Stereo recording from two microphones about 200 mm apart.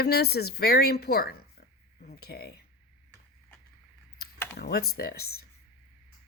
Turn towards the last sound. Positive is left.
turn(degrees=50)  # may be behind; listen again after turning